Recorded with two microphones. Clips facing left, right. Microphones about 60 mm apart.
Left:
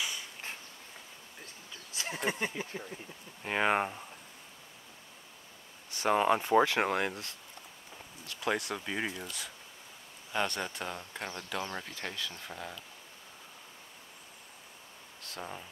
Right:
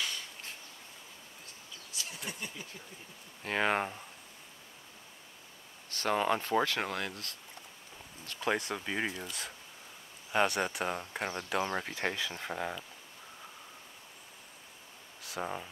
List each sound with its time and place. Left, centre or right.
1.9 s speech: left
3.4 s speech: centre
5.9 s speech: centre
8.3 s speech: centre
10.9 s speech: right
15.2 s a sound: centre